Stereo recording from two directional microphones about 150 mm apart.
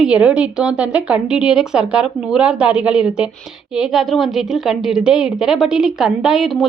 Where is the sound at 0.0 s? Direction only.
5° right (ahead or behind).